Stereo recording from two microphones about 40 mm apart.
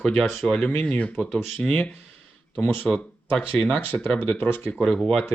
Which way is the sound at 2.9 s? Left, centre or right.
Right.